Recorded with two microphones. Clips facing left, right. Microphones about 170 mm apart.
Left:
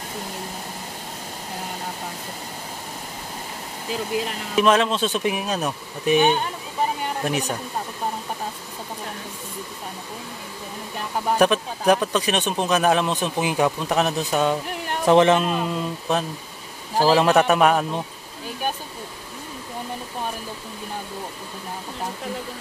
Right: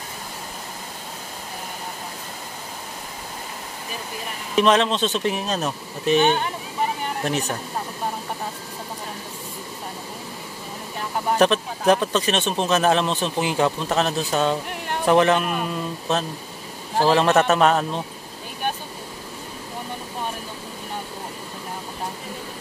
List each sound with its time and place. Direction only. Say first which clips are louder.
4.6 s speech: even; 5° left (ahead or behind)
11.3 s speech: even; 10° left (ahead or behind)